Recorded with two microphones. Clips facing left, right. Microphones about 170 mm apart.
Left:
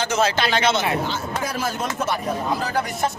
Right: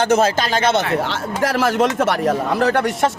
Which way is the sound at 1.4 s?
85° right.